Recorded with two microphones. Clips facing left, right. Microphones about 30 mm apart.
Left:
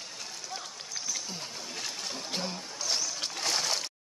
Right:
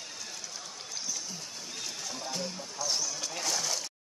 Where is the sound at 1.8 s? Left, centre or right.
Left.